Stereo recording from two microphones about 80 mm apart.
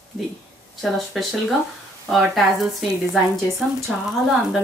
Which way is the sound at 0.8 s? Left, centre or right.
Centre.